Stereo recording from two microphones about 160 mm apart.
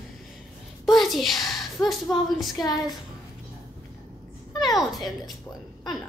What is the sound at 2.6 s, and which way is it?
Speech, 25° left (ahead or behind).